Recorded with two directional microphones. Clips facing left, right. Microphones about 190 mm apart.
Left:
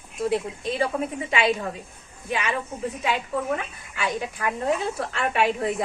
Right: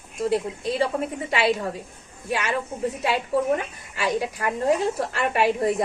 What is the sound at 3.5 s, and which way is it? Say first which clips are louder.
Speech: right 3 dB; 35° right (ahead or behind).